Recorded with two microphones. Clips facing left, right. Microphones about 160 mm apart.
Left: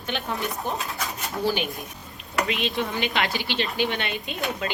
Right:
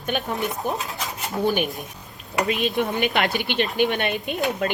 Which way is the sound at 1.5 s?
55° right (ahead or behind).